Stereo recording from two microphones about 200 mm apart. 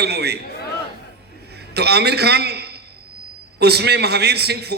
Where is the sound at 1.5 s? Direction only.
55° right (ahead or behind).